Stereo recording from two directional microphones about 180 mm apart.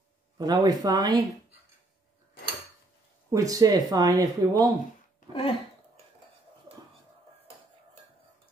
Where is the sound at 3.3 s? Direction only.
20° right (ahead or behind).